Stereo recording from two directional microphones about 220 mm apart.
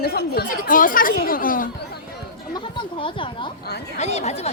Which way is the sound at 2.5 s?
20° left (ahead or behind).